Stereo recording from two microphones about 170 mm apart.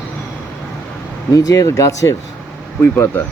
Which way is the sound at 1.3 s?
20° left (ahead or behind).